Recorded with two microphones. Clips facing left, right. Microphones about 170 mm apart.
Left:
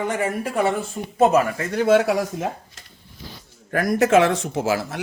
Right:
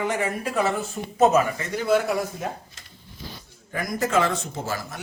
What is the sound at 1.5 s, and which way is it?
Speech, 65° left (ahead or behind).